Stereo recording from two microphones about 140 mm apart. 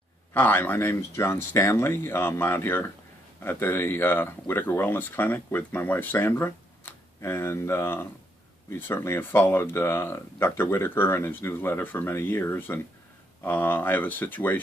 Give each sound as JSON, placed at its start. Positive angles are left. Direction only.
{"t": 0.3, "sound": "speech", "side_deg": 15}